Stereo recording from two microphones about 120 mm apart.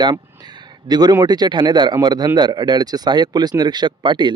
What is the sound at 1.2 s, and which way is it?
Speech, 35° right (ahead or behind).